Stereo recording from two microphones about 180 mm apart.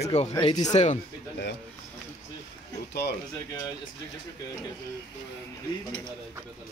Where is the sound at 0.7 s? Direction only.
40° left (ahead or behind).